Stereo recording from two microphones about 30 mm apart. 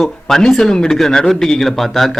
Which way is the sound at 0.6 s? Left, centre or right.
Left.